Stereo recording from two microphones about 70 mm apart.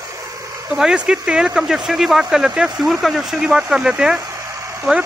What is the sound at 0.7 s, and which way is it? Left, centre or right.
Speech, centre.